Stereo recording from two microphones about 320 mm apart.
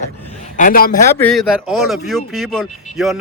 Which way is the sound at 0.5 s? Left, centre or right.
Left.